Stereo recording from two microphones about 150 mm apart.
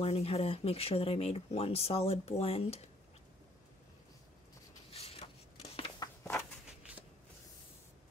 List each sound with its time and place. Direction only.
0.0 s speech: 40° left (ahead or behind)
4.9 s a sound: 40° left (ahead or behind)
6.3 s walk: 5° right (ahead or behind)